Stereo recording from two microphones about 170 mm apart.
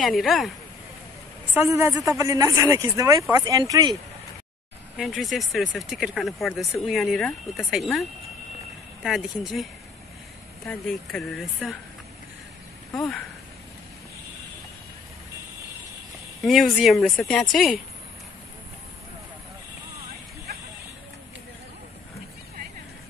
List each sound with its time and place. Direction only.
0.2 s speech: centre (ahead or behind)
1.5 s speech: 15° right (ahead or behind)
4.9 s speech: centre (ahead or behind)
16.4 s speech: centre (ahead or behind)